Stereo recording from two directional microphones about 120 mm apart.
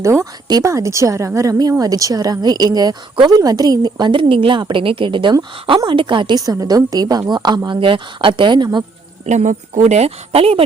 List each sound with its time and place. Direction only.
0.0 s speech: 25° right (ahead or behind)
9.2 s speech: 75° right (ahead or behind); by 10.6 s 55° right (ahead or behind)